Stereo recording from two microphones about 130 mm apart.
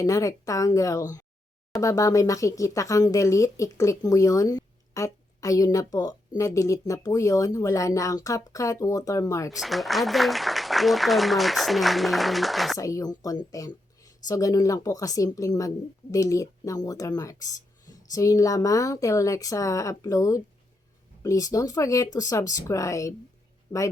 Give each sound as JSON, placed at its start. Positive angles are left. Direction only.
{"t": 0.0, "sound": "speech", "side_deg": 25}
{"t": 9.6, "sound": "speech", "side_deg": 0}
{"t": 12.8, "sound": "speech", "side_deg": 25}